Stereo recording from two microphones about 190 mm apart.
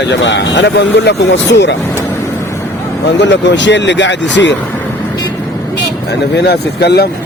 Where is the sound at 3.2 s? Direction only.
65° left (ahead or behind).